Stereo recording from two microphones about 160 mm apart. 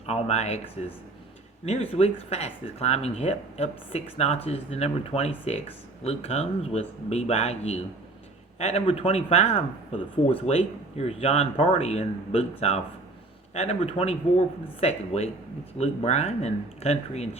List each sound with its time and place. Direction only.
0.0 s speech: 40° left (ahead or behind)